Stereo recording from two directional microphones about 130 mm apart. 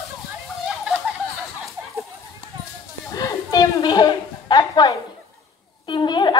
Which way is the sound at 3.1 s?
25° left (ahead or behind).